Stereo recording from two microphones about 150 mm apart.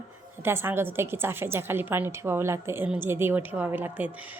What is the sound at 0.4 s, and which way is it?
A woman's voice, 15° right (ahead or behind).